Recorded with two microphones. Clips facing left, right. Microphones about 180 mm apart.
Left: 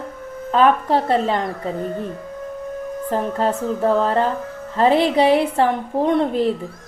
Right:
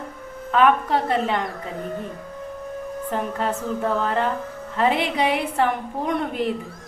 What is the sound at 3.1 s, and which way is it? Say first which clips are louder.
A woman's voice: left 5 dB; 35° left (ahead or behind).